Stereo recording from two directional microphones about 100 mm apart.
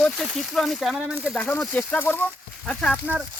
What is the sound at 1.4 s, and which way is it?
Speech, 15° left (ahead or behind).